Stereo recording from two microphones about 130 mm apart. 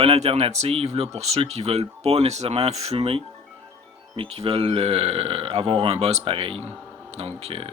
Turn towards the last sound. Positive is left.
turn(degrees=-50)  # may be behind; listen again after turning